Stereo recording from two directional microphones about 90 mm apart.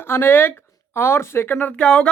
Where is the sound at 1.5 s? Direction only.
15° left (ahead or behind).